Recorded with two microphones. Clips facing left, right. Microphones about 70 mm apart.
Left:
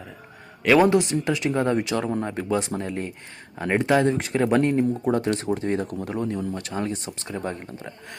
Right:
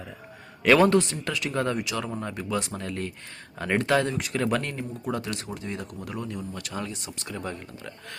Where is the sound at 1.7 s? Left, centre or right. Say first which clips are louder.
Left 6 dB; left; by 4.1 s centre.